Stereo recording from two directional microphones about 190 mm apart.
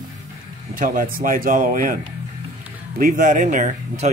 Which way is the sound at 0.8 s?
45° right (ahead or behind).